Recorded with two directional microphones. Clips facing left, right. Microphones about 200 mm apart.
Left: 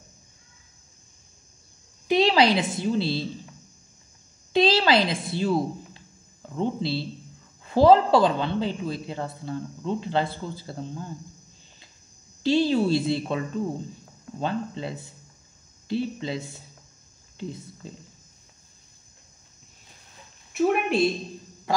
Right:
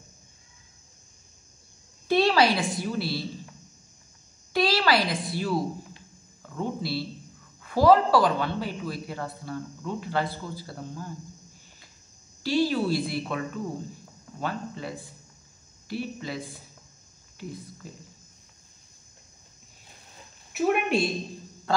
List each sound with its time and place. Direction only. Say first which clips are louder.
2.0 s a woman's voice: left 2 dB; 15° left (ahead or behind)
4.5 s a man's voice: left 3 dB; 20° left (ahead or behind)
12.4 s a man's voice: left 3 dB; 25° left (ahead or behind)
14.4 s a man's voice: left 4 dB; 25° left (ahead or behind)
20.5 s a sound: left 2 dB; centre (ahead or behind)